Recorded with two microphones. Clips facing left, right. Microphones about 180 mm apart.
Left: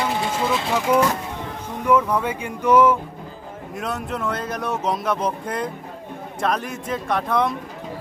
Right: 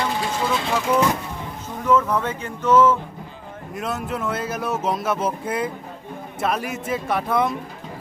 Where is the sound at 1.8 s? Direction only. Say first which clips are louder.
Left 1 dB; 10° left (ahead or behind).